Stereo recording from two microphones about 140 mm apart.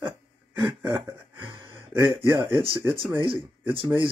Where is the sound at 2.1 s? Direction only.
35° right (ahead or behind).